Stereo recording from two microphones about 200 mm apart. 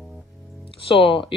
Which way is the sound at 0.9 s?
25° left (ahead or behind).